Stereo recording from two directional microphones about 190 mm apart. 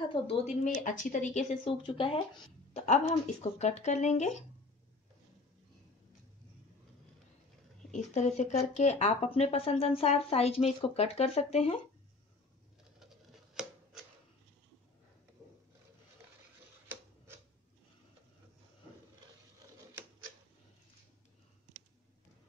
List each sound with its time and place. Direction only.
0.1 s speech: 30° left (ahead or behind)
0.7 s speech: 45° left (ahead or behind)
7.9 s speech: 40° left (ahead or behind)
13.0 s a sound: centre (ahead or behind)